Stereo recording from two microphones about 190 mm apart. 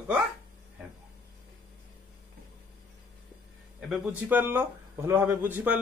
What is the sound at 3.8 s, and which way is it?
Speech, 5° right (ahead or behind).